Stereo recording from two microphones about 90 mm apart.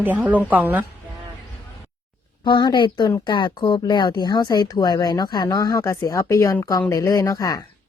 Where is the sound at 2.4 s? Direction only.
60° left (ahead or behind); by 7.7 s 40° left (ahead or behind).